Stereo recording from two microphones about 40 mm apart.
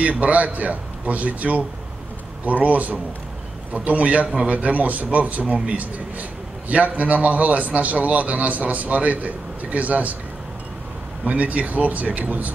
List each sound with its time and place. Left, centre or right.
0.0 s a man's voice: right
11.2 s a man's voice: right